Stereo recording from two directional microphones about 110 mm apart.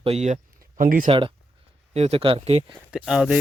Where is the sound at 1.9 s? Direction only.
70° right (ahead or behind).